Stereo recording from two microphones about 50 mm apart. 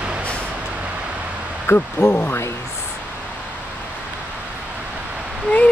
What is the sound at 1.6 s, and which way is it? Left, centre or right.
Speech, left.